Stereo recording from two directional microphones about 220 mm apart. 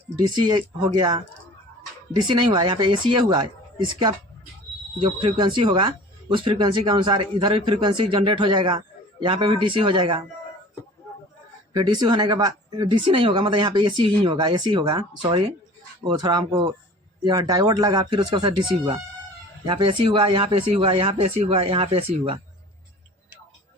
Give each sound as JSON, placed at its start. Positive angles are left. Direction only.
{"t": 0.3, "sound": "speech", "side_deg": -20}
{"t": 2.2, "sound": "speech", "side_deg": -20}
{"t": 11.7, "sound": "speech", "side_deg": -20}